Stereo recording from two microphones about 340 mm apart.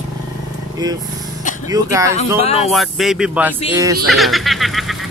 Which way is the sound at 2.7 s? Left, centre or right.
Centre.